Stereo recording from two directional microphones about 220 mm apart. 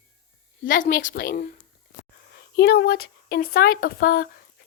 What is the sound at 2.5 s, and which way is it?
A woman's voice, 45° left (ahead or behind).